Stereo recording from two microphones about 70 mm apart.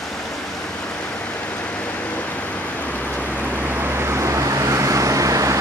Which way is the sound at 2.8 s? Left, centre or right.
Left.